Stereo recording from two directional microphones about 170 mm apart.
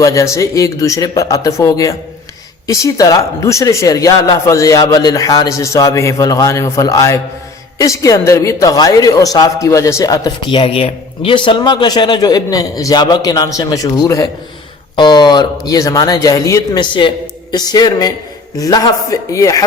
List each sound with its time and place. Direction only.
0.0 s speech: 20° left (ahead or behind)